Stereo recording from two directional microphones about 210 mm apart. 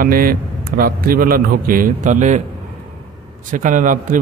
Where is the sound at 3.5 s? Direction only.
40° right (ahead or behind).